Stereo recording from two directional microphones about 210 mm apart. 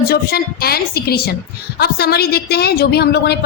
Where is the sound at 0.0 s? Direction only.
45° left (ahead or behind).